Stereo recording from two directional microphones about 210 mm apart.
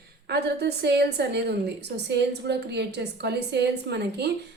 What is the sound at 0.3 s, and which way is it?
A woman's voice, 50° right (ahead or behind).